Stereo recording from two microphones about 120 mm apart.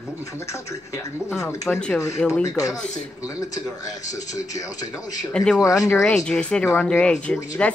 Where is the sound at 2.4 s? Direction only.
25° left (ahead or behind).